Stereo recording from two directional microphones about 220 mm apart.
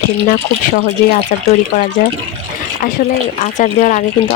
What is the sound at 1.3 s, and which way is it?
Speech, 35° left (ahead or behind).